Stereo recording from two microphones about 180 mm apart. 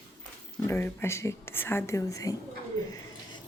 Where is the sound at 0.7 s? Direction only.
15° left (ahead or behind).